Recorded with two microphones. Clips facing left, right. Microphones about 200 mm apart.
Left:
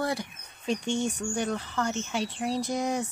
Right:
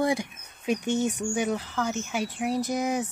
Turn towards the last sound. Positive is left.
turn(degrees=-5)  # may be behind; listen again after turning